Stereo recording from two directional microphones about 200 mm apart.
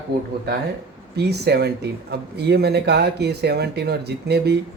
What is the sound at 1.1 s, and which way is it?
Speech, 55° right (ahead or behind).